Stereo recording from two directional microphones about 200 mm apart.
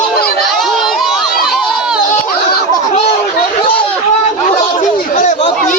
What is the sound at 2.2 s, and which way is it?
Baby laughter, 50° left (ahead or behind).